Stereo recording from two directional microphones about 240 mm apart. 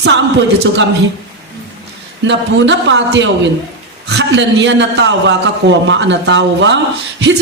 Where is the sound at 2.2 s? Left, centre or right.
Right.